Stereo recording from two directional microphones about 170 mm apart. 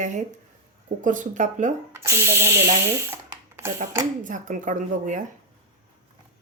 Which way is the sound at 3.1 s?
15° right (ahead or behind).